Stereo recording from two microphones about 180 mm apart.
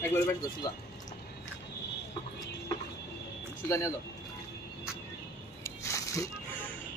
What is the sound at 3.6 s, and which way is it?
Speech, 15° left (ahead or behind).